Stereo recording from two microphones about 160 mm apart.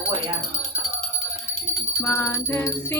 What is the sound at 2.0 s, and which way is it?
Music, 15° left (ahead or behind).